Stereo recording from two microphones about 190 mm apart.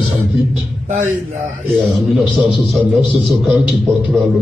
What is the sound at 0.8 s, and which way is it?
Speech, 40° right (ahead or behind).